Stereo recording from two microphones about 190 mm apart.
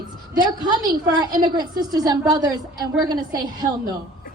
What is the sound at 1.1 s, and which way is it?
A woman's voice, 20° right (ahead or behind).